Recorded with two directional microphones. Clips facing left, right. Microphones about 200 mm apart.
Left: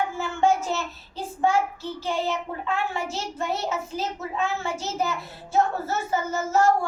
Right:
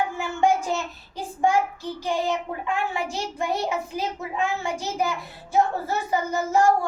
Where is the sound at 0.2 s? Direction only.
15° right (ahead or behind).